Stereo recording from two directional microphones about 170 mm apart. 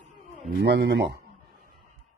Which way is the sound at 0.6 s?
85° right.